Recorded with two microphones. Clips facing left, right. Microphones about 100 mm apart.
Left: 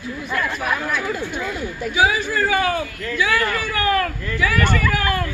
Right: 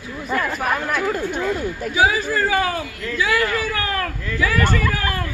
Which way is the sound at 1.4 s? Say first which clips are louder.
Right 3 dB; 40° right (ahead or behind).